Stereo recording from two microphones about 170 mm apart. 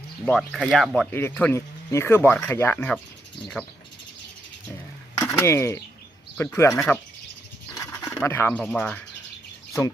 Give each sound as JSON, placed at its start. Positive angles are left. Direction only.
{"t": 0.3, "sound": "speech", "side_deg": 0}
{"t": 1.1, "sound": "speech", "side_deg": 10}
{"t": 5.1, "sound": "speech", "side_deg": 10}
{"t": 7.7, "sound": "a sound", "side_deg": 15}
{"t": 8.2, "sound": "speech", "side_deg": 15}